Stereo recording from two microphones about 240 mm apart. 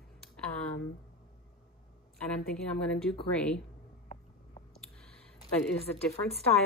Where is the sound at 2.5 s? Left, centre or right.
Centre.